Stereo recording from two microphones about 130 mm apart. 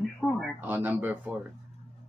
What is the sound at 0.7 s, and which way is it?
Speech, 15° right (ahead or behind).